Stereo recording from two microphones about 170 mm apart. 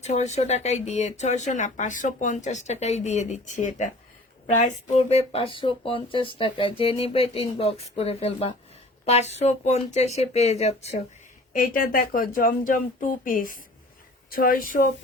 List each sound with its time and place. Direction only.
0.0 s speech: 40° left (ahead or behind)
11.6 s speech: 55° left (ahead or behind)